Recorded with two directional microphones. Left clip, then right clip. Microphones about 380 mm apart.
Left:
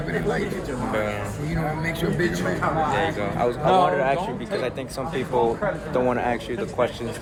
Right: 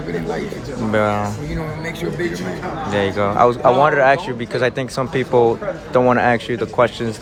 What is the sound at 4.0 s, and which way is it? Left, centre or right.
Speech, right.